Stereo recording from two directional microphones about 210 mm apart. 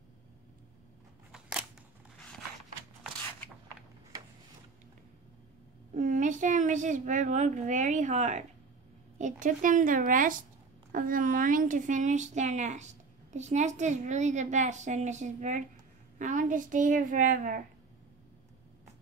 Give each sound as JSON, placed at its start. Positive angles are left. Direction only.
{"t": 1.3, "sound": "camera", "side_deg": -5}
{"t": 5.9, "sound": "a woman's voice", "side_deg": -35}